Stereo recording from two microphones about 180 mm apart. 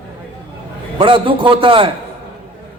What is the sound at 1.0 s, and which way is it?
Speech, 30° right (ahead or behind).